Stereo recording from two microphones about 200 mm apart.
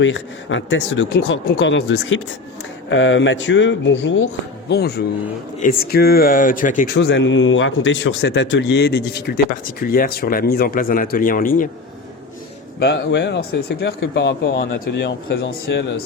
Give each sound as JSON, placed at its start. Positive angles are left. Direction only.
{"t": 0.0, "sound": "speech", "side_deg": 65}
{"t": 4.7, "sound": "speech", "side_deg": 55}
{"t": 12.8, "sound": "speech", "side_deg": 60}